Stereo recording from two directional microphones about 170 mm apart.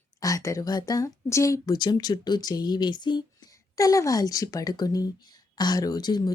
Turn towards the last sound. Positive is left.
turn(degrees=25)  # may be behind; listen again after turning